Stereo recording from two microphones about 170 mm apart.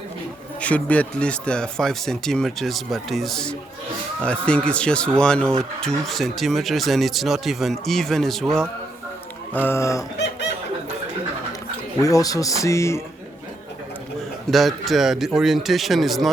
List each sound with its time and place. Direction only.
0.6 s speech: 10° left (ahead or behind)
12.0 s speech: 20° left (ahead or behind)
14.5 s speech: centre (ahead or behind)